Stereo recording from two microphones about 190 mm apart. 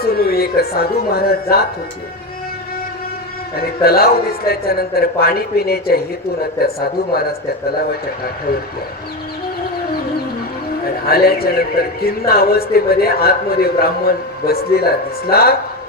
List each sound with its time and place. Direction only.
0.0 s speech: 55° left (ahead or behind)
3.5 s speech: 55° left (ahead or behind)
10.8 s speech: 55° left (ahead or behind)